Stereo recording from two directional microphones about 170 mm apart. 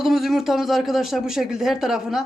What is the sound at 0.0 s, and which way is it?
Speech, centre (ahead or behind).